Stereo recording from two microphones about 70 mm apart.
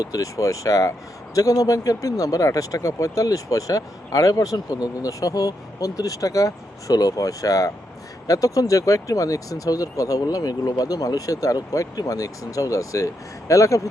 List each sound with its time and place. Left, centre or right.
0.0 s speech: left